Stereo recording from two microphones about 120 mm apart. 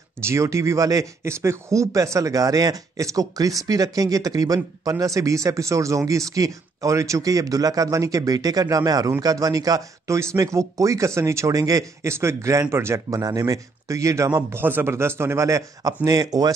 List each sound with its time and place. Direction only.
0.2 s speech: 25° right (ahead or behind)